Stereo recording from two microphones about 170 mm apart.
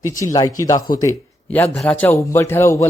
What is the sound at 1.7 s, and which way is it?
Speech, 5° left (ahead or behind).